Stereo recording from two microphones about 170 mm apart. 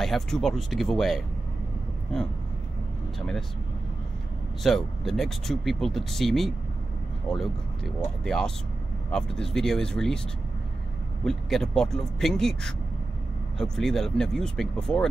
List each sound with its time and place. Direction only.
0.0 s speech: centre (ahead or behind)
4.6 s speech: centre (ahead or behind)
11.2 s speech: centre (ahead or behind)